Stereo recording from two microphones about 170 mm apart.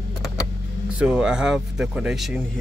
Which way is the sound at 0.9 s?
5° right (ahead or behind).